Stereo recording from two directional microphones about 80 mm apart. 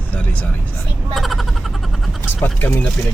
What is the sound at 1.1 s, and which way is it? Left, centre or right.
Speech, centre.